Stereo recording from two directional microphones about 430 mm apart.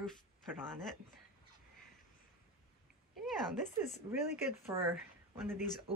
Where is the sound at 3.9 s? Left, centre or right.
Centre.